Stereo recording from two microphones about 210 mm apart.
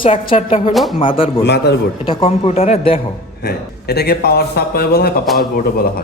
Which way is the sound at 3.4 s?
50° left (ahead or behind).